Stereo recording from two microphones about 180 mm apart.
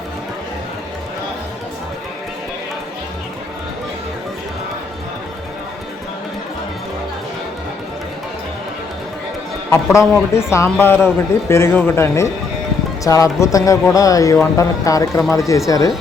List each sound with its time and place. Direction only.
9.6 s speech: 15° left (ahead or behind)